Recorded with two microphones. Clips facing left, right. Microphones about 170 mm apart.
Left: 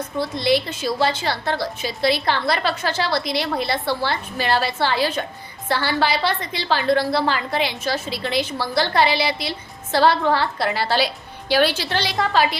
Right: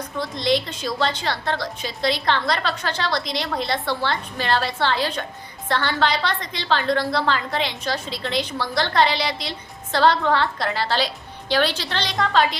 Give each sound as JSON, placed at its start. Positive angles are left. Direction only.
{"t": 0.2, "sound": "a woman's voice", "side_deg": 5}